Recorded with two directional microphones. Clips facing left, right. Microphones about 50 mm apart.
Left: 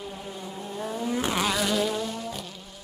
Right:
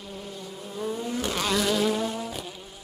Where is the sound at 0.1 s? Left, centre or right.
Centre.